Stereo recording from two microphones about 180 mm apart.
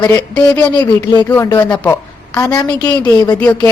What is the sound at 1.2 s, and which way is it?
A woman's voice, 10° left (ahead or behind).